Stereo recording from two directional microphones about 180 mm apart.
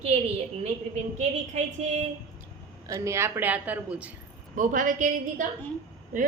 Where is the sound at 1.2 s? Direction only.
40° right (ahead or behind).